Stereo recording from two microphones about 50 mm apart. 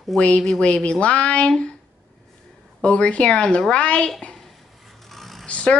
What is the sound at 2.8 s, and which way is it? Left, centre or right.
Speech, left.